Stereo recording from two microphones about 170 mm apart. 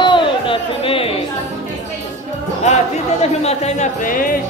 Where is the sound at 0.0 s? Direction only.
30° left (ahead or behind).